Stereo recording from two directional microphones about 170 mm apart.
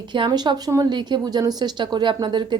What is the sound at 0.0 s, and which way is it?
Speech, 25° right (ahead or behind).